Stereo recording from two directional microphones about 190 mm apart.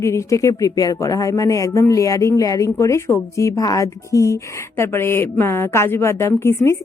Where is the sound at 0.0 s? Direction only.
15° left (ahead or behind).